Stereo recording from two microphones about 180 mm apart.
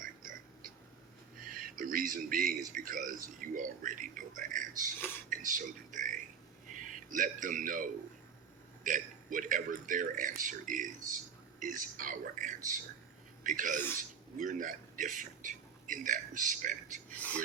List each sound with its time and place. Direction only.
0.0 s a sound: 50° right (ahead or behind)
1.5 s speech: 50° right (ahead or behind)
17.1 s speech: 10° left (ahead or behind)